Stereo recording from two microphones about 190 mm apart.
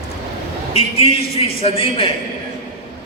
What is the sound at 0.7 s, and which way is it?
A man's voice, 30° left (ahead or behind).